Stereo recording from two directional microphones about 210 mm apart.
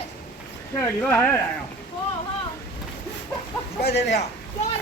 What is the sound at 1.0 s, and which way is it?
Speech, 10° left (ahead or behind).